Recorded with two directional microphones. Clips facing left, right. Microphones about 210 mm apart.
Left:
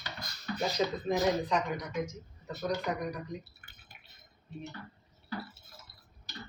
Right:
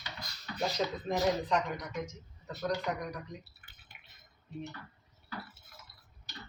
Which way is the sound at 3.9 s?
40° left (ahead or behind).